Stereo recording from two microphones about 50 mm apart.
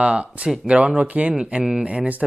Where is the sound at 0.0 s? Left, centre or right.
Right.